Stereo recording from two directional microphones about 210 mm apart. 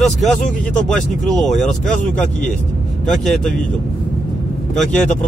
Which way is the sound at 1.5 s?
35° left (ahead or behind).